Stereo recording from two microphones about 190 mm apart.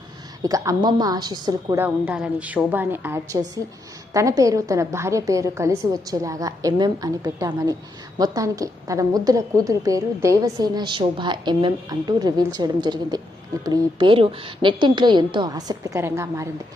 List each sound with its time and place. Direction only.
0.4 s a woman's voice: 15° right (ahead or behind)